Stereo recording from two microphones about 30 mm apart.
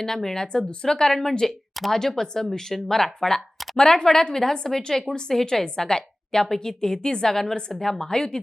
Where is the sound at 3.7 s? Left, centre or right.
Left.